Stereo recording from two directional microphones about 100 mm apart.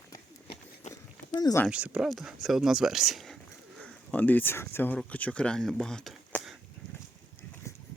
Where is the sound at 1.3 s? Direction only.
40° left (ahead or behind).